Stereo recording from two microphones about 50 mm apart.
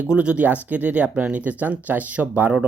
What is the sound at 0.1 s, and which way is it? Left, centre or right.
Speech, right.